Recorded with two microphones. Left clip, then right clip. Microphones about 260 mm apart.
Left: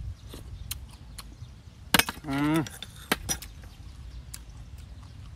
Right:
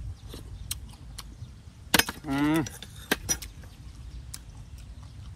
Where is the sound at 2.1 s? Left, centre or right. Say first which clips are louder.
Right 1 dB; centre.